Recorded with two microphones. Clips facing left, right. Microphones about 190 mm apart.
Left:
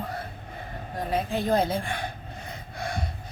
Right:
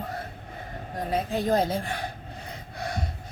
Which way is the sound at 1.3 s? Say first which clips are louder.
Even; 40° right (ahead or behind).